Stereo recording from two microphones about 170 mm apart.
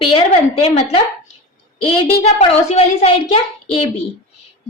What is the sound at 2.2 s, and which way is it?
A child's voice, 35° left (ahead or behind).